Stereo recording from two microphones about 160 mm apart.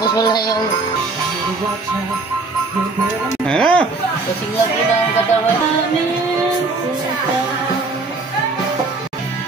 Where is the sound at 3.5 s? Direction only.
5° left (ahead or behind).